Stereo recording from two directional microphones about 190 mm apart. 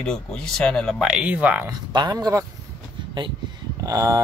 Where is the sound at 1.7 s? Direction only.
20° right (ahead or behind).